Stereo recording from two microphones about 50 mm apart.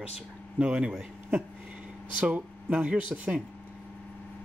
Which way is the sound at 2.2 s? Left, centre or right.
Right.